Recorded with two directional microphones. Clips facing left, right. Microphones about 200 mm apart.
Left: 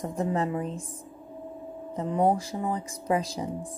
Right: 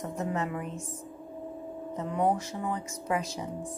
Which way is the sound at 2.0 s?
30° left (ahead or behind).